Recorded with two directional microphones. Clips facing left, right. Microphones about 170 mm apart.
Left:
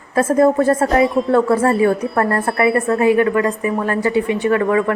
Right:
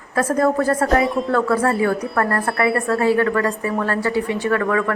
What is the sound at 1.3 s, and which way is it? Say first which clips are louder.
A woman's voice: left 3 dB; 25° left (ahead or behind).